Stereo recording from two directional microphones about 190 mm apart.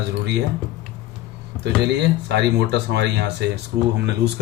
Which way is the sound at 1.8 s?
60° right (ahead or behind).